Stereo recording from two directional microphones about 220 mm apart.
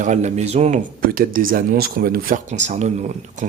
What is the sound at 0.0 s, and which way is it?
Speech, 30° right (ahead or behind).